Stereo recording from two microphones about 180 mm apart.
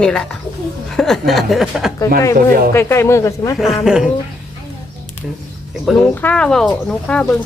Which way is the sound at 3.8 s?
5° right (ahead or behind).